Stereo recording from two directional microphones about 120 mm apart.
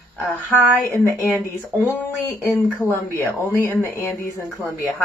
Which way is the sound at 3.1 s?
20° left (ahead or behind).